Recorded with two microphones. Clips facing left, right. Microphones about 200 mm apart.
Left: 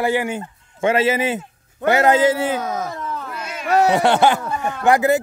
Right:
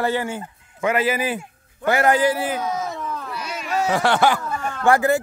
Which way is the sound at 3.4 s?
60° left (ahead or behind).